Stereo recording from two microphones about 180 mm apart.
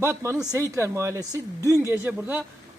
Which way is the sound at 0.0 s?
15° right (ahead or behind).